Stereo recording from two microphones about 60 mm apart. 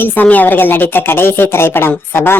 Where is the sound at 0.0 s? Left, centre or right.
Left.